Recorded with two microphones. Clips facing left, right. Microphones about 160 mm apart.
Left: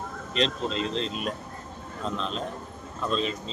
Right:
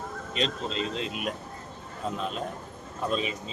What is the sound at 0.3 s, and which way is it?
Speech, centre (ahead or behind).